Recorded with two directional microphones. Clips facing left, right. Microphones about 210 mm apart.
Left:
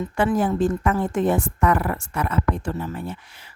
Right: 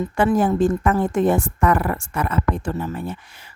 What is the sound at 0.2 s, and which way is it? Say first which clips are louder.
Speech: right 3 dB; 45° right (ahead or behind).